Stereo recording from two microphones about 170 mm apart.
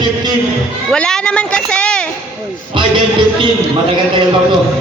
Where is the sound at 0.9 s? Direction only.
5° left (ahead or behind).